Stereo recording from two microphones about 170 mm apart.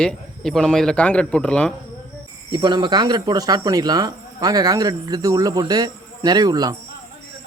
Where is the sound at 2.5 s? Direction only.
25° right (ahead or behind).